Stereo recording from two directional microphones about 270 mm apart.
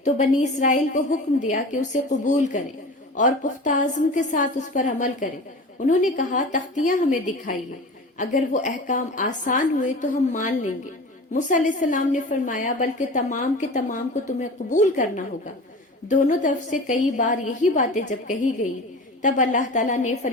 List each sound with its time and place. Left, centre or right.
0.0 s a woman's voice: left